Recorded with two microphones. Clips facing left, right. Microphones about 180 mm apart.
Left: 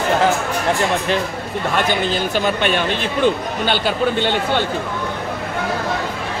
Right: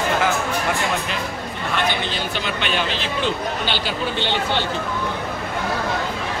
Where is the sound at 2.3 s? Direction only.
45° left (ahead or behind).